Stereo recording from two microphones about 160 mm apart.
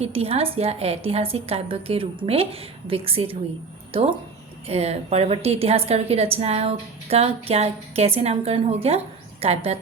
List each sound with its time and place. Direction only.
0.0 s a woman's voice: 40° right (ahead or behind)
4.6 s a woman's voice: 40° right (ahead or behind)